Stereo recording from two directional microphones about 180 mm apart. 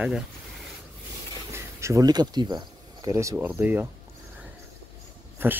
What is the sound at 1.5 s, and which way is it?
Speech, 15° right (ahead or behind).